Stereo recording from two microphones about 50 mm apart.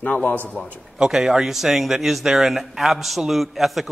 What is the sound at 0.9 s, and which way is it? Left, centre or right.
A man's voice, centre.